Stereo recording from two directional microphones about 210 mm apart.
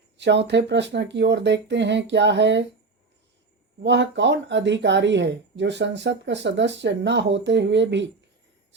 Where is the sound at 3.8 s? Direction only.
55° right (ahead or behind).